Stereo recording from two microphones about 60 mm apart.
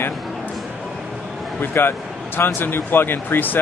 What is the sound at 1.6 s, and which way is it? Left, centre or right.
Speech, left.